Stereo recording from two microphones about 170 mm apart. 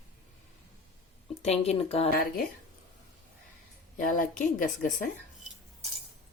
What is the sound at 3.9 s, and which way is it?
A woman's voice, 50° left (ahead or behind).